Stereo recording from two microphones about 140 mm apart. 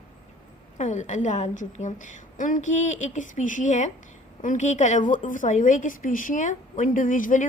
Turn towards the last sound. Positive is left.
turn(degrees=70)  # may be behind; listen again after turning